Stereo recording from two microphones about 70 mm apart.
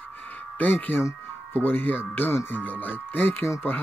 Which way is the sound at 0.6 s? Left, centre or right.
Left.